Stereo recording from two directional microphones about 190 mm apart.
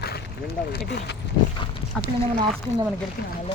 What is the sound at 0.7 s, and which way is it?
Speech, 60° left (ahead or behind).